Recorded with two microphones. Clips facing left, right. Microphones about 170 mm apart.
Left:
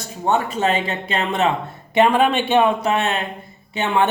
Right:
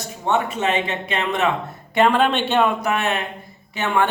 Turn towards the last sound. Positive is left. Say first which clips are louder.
# left 2 dB
turn(degrees=20)  # may be behind; listen again after turning